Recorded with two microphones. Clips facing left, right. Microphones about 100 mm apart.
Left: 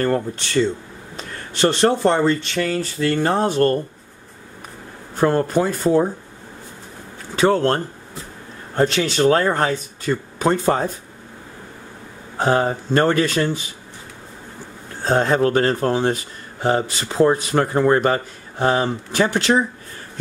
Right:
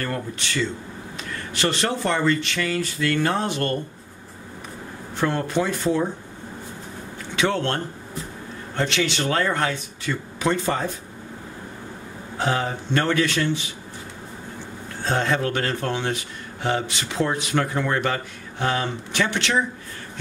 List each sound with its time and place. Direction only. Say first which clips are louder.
0.0 s speech: left 8 dB; 35° left (ahead or behind)
5.1 s speech: left 6 dB; 40° left (ahead or behind)
7.3 s speech: left 6 dB; 35° left (ahead or behind)
12.4 s speech: left 6 dB; 40° left (ahead or behind)
15.0 s speech: left 6 dB; 40° left (ahead or behind)